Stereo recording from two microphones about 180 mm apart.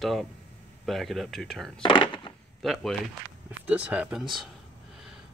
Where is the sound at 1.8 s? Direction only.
25° left (ahead or behind).